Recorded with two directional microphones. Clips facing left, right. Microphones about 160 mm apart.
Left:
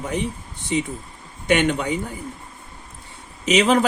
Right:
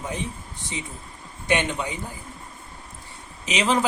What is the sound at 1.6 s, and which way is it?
Speech, 65° left (ahead or behind).